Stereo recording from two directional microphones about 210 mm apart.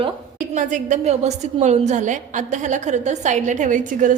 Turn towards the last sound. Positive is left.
turn(degrees=-35)  # may be behind; listen again after turning